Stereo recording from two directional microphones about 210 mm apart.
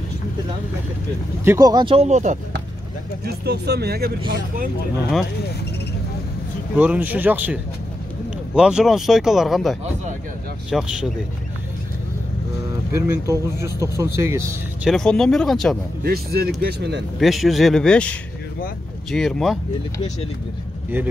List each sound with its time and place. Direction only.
1.4 s speech: 15° right (ahead or behind); by 2.3 s 35° right (ahead or behind)
3.3 s speech: 50° right (ahead or behind)
6.8 s speech: 5° right (ahead or behind)
8.5 s speech: 5° right (ahead or behind)
12.9 s speech: 10° right (ahead or behind)
14.9 s speech: centre (ahead or behind)
16.0 s speech: 45° right (ahead or behind)
17.2 s speech: centre (ahead or behind)